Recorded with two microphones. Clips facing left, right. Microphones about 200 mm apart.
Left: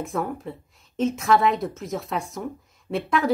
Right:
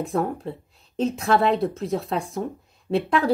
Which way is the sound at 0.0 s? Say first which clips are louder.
Right 3 dB; 35° right (ahead or behind).